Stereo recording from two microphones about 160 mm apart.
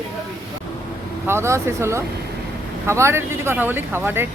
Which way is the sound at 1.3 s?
15° right (ahead or behind).